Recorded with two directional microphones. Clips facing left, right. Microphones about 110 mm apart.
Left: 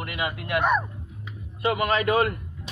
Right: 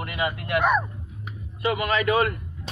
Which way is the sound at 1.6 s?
25° left (ahead or behind).